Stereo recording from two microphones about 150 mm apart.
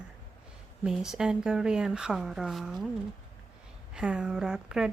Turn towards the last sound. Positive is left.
turn(degrees=-5)  # may be behind; listen again after turning